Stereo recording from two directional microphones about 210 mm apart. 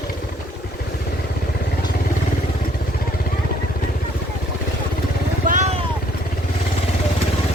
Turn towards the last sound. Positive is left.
turn(degrees=-40)  # may be behind; listen again after turning